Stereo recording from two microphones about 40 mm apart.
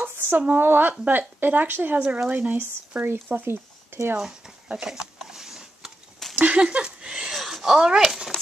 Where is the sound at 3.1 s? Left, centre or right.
Right.